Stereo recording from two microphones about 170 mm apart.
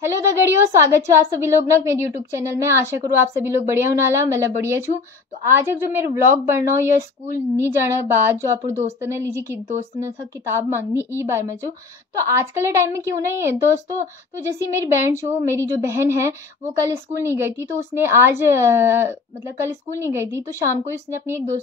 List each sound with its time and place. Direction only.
0.0 s a woman's voice: 15° right (ahead or behind)